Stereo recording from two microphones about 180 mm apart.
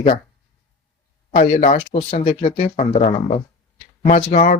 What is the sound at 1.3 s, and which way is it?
Speech, 40° left (ahead or behind).